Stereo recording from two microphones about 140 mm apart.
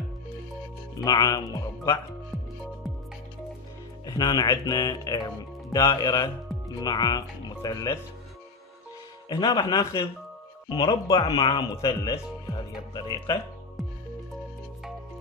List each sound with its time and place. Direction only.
0.9 s speech: 25° left (ahead or behind)
4.0 s speech: 30° left (ahead or behind)
9.3 s speech: 35° left (ahead or behind)